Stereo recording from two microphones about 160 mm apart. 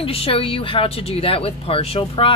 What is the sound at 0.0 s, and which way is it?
Speech, 35° left (ahead or behind).